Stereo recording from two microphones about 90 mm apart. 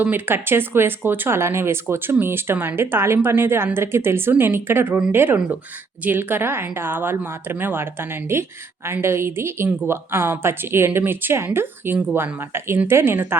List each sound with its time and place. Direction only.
0.0 s speech: 25° right (ahead or behind)